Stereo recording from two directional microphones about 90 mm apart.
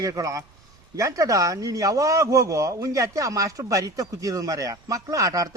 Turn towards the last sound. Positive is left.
turn(degrees=-40)  # may be behind; listen again after turning